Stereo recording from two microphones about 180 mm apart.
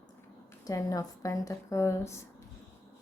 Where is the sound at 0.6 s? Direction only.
20° left (ahead or behind).